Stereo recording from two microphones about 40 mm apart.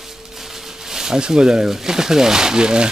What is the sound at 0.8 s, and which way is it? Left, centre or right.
Speech, centre.